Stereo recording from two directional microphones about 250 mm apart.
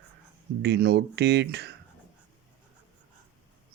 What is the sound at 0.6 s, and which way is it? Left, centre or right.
Speech, right.